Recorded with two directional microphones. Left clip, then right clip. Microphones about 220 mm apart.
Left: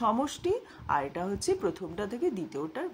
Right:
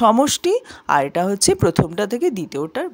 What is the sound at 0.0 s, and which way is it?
Speech, 45° right (ahead or behind).